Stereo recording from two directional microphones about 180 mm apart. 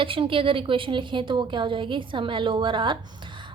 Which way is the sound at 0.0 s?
30° right (ahead or behind).